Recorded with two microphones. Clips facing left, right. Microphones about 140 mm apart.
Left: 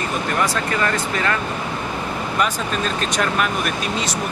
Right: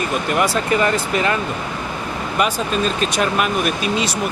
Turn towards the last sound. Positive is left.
turn(degrees=-15)  # may be behind; listen again after turning